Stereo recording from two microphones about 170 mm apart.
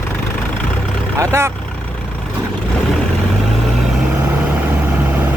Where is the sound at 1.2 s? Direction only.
15° right (ahead or behind).